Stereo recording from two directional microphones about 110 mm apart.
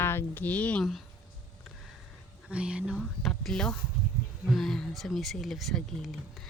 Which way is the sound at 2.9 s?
5° left (ahead or behind).